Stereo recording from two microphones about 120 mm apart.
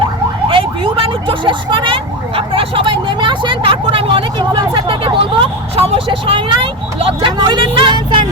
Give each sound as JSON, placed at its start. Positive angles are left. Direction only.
{"t": 0.0, "sound": "speech", "side_deg": -45}